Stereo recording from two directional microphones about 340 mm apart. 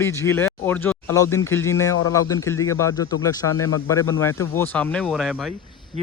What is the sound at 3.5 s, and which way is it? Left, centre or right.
Speech, left.